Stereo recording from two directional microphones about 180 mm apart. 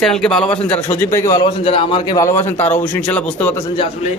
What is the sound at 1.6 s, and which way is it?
A man's voice, 30° left (ahead or behind).